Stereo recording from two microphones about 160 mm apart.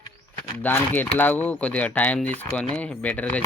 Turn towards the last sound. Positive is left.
turn(degrees=10)  # may be behind; listen again after turning